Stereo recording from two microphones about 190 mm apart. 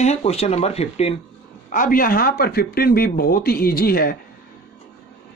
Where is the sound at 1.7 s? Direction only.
45° left (ahead or behind).